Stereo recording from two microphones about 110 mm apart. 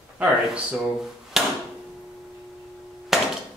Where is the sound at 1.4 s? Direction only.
5° right (ahead or behind).